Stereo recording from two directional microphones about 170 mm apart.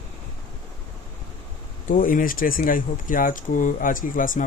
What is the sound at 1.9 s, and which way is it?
Speech, 55° left (ahead or behind).